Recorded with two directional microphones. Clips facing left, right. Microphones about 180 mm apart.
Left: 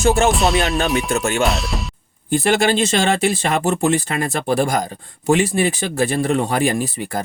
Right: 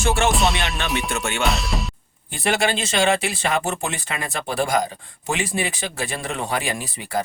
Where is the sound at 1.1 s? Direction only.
40° left (ahead or behind).